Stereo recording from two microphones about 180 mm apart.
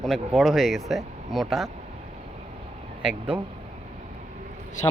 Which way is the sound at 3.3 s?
5° right (ahead or behind).